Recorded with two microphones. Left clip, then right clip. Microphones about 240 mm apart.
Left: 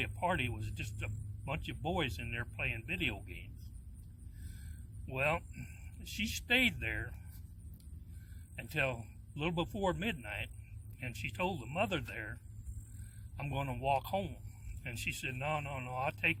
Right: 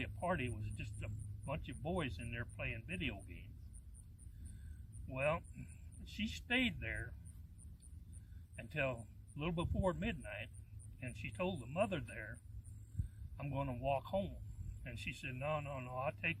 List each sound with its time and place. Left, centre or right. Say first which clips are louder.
0.0 s speech: left 6 dB; left
5.1 s speech: left 4 dB; left
8.5 s speech: left 5 dB; left